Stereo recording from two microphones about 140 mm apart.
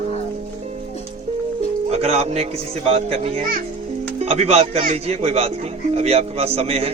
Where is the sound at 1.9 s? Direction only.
50° right (ahead or behind).